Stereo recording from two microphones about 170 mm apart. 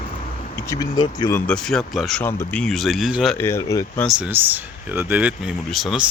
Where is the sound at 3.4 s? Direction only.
15° left (ahead or behind).